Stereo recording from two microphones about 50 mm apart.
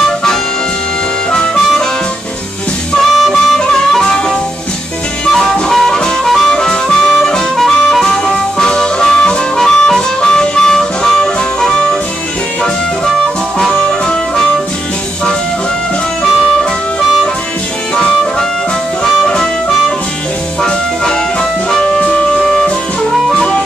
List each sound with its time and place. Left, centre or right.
0.0 s music: centre
1.3 s harmonica: centre
3.2 s harmonica: centre
13.8 s music: centre
19.0 s harmonica: centre
20.6 s music: centre